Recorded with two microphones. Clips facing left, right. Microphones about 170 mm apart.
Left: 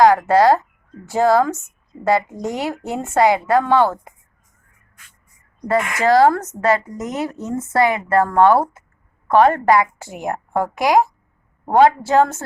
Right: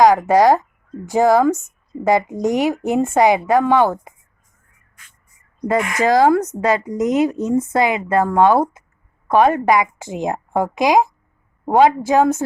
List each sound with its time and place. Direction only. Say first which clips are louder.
0.0 s speech: right 1 dB; 15° right (ahead or behind)
5.6 s speech: even; 15° right (ahead or behind)
11.6 s a woman's voice: even; 5° right (ahead or behind)
11.9 s speech: right 1 dB; 15° right (ahead or behind)